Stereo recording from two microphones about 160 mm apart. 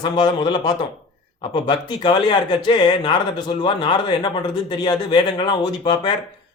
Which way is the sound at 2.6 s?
30° left (ahead or behind).